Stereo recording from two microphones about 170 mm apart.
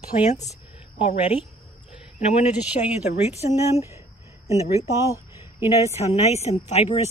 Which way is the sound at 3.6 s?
15° right (ahead or behind).